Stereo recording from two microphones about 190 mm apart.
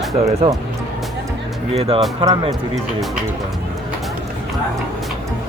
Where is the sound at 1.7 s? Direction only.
30° right (ahead or behind).